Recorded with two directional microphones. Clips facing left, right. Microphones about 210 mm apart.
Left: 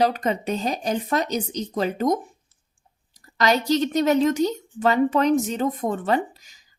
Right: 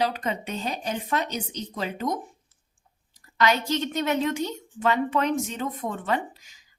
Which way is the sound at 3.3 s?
35° left (ahead or behind).